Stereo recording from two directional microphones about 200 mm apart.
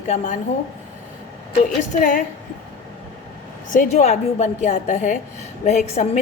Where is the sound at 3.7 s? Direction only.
35° left (ahead or behind).